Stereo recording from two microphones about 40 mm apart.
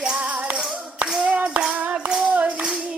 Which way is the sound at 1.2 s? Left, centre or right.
Right.